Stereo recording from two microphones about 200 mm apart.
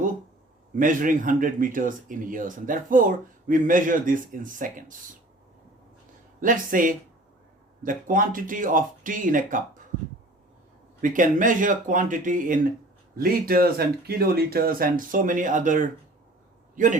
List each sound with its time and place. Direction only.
0.8 s speech: 40° right (ahead or behind)
6.4 s speech: 40° right (ahead or behind)
11.0 s a man's voice: 40° right (ahead or behind)